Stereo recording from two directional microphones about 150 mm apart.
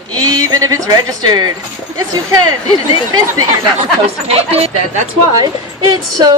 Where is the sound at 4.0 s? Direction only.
45° right (ahead or behind).